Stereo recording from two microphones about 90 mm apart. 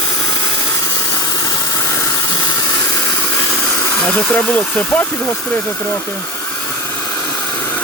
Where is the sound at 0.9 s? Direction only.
40° left (ahead or behind).